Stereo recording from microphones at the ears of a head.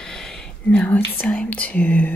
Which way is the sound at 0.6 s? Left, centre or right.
Centre.